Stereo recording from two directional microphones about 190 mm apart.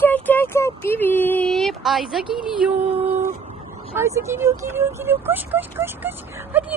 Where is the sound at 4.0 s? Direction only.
15° right (ahead or behind).